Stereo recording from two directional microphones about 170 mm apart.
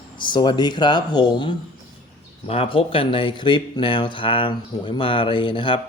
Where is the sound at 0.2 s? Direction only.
25° left (ahead or behind).